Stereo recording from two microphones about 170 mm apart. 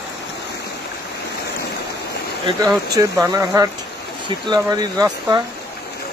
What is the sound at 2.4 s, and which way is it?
Speech, 20° right (ahead or behind).